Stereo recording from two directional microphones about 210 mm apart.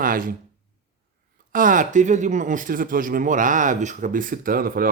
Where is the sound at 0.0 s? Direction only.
40° right (ahead or behind).